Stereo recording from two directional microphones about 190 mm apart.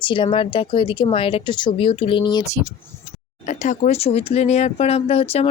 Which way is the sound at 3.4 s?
40° left (ahead or behind).